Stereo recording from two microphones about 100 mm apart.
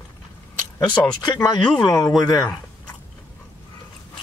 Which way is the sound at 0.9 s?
50° left (ahead or behind).